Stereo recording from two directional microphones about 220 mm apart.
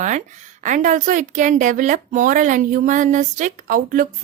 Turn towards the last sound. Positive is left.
turn(degrees=-35)  # may be behind; listen again after turning